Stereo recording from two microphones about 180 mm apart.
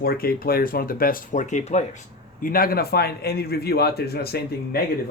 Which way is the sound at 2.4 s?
55° left (ahead or behind).